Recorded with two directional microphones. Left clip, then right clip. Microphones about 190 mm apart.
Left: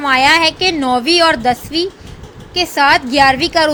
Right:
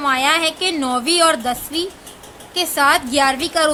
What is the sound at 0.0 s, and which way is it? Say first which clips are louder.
A woman's voice: left 6 dB; 15° left (ahead or behind).